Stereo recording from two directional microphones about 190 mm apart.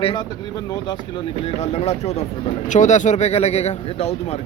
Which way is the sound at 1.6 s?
35° left (ahead or behind).